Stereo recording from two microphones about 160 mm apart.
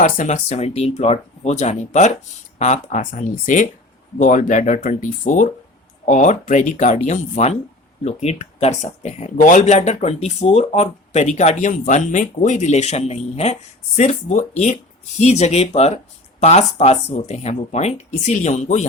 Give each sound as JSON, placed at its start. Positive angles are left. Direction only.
{"t": 0.0, "sound": "speech", "side_deg": 50}